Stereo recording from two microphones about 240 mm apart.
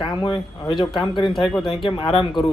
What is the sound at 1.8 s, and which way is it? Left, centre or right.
Speech, centre.